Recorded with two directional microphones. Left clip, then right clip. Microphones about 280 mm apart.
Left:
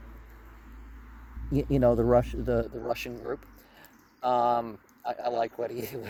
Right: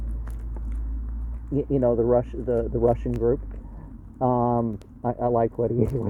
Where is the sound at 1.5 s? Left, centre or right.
Left.